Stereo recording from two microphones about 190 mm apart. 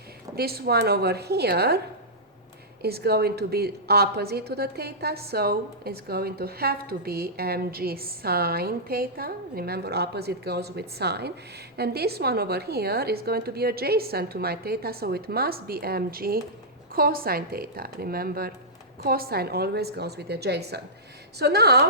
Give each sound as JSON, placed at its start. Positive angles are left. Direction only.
{"t": 0.3, "sound": "a woman's voice", "side_deg": -55}
{"t": 2.8, "sound": "a woman's voice", "side_deg": -55}